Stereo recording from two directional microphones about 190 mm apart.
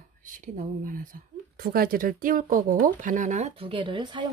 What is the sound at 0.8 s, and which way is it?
Speech, 45° right (ahead or behind).